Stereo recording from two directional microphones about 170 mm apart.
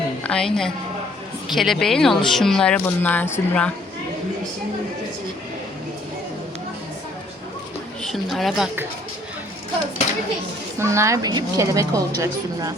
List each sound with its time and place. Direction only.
0.2 s a woman's voice: 5° left (ahead or behind)
8.1 s speech: centre (ahead or behind)
10.8 s a woman's voice: 15° right (ahead or behind)